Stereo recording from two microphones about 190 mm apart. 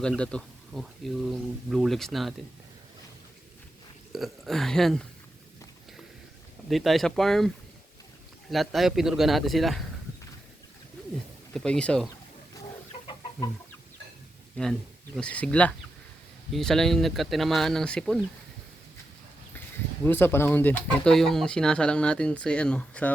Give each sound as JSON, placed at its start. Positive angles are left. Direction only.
{"t": 0.0, "sound": "speech", "side_deg": 5}
{"t": 4.1, "sound": "speech", "side_deg": 0}
{"t": 6.7, "sound": "speech", "side_deg": 0}
{"t": 11.5, "sound": "speech", "side_deg": 5}
{"t": 12.9, "sound": "chicken", "side_deg": 35}
{"t": 14.5, "sound": "speech", "side_deg": 5}
{"t": 20.1, "sound": "speech", "side_deg": 10}